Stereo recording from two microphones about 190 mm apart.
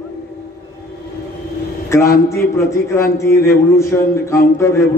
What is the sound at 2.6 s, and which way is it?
A man's voice, 15° left (ahead or behind).